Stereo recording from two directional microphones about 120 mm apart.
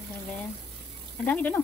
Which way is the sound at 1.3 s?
10° left (ahead or behind).